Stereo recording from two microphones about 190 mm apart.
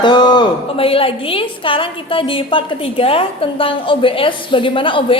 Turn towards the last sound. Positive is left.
turn(degrees=25)  # may be behind; listen again after turning